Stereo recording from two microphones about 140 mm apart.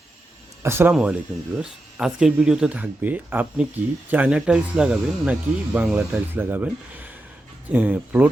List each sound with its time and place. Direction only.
0.6 s speech: 15° right (ahead or behind)
0.9 s speech: 5° right (ahead or behind)